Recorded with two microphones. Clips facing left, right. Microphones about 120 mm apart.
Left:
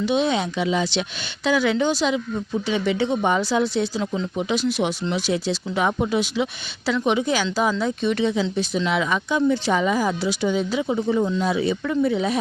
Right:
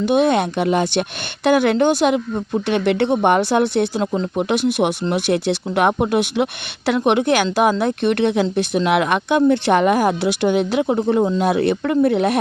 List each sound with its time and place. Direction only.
0.0 s speech: 55° right (ahead or behind)